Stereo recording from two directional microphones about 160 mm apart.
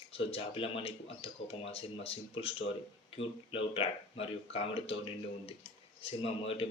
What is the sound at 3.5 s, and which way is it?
Speech, 35° left (ahead or behind).